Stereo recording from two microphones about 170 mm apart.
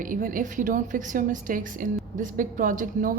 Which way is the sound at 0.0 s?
50° right (ahead or behind).